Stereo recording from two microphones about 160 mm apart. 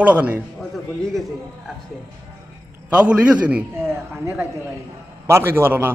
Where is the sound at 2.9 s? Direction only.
5° right (ahead or behind).